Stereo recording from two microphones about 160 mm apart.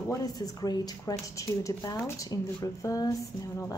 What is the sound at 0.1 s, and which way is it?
Speech, 25° left (ahead or behind).